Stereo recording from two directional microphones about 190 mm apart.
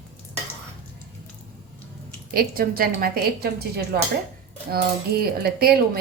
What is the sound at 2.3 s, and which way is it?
Speech, 50° right (ahead or behind).